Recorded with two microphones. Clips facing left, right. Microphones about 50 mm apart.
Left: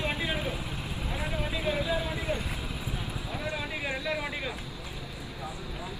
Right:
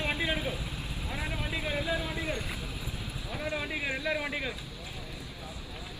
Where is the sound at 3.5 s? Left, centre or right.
Centre.